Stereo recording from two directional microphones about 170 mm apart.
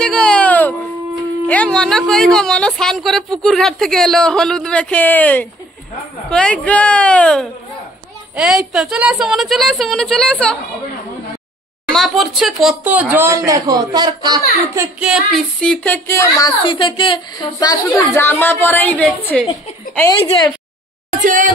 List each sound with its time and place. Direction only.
0.0 s music: 5° left (ahead or behind)
1.5 s speech: 5° left (ahead or behind)
11.9 s speech: centre (ahead or behind); by 14.9 s 25° right (ahead or behind)
15.0 s speech: 5° right (ahead or behind); by 18.2 s 25° left (ahead or behind)
18.2 s speech: 15° left (ahead or behind)
20.1 s a woman's voice: 25° left (ahead or behind)
21.2 s a sound: 50° right (ahead or behind)